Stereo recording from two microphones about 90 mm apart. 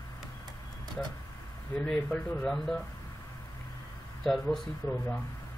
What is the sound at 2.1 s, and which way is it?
Speech, 10° left (ahead or behind).